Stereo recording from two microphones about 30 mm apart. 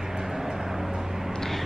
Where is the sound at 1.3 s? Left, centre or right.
Centre.